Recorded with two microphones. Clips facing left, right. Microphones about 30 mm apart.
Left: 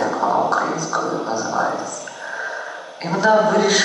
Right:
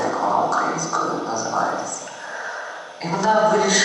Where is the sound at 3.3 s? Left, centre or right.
Centre.